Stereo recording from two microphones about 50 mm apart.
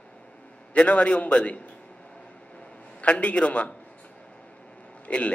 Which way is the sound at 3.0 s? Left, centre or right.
Left.